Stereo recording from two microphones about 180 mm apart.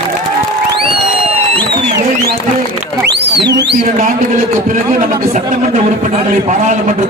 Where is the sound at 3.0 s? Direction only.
70° right (ahead or behind).